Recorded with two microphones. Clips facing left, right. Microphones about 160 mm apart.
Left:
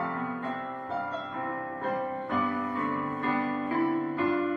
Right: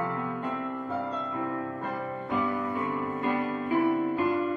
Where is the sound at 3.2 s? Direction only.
15° right (ahead or behind).